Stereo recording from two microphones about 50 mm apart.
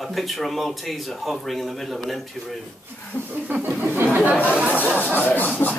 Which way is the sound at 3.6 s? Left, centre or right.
Right.